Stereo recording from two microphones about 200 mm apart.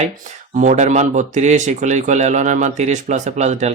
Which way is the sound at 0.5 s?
40° right (ahead or behind).